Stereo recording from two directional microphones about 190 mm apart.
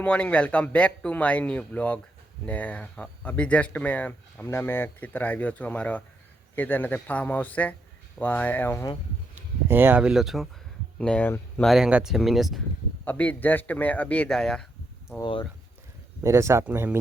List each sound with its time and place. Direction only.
0.0 s speech: 5° left (ahead or behind)
9.6 s speech: 10° right (ahead or behind); by 11.7 s 10° left (ahead or behind)
11.7 s speech: 5° right (ahead or behind)
15.2 s speech: 25° left (ahead or behind)
16.2 s speech: 15° right (ahead or behind)